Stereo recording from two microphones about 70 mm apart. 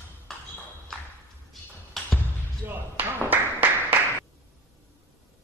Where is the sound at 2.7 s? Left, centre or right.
Right.